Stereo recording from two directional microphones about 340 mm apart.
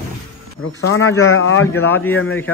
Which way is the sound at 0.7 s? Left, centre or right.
Left.